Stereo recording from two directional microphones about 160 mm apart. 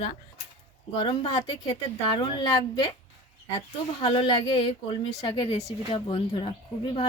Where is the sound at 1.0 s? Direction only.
40° left (ahead or behind).